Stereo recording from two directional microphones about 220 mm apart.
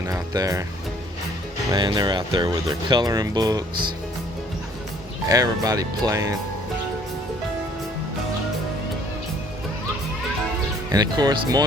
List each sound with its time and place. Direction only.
0.0 s speech: 15° right (ahead or behind)
1.7 s speech: 20° right (ahead or behind)
5.3 s speech: 15° right (ahead or behind)
10.9 s speech: 20° right (ahead or behind)